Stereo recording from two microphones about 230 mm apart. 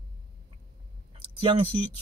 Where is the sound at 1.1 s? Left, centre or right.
Right.